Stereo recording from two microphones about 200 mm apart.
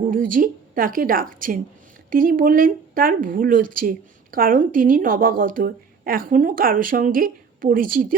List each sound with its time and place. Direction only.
0.0 s a woman's voice: 45° right (ahead or behind)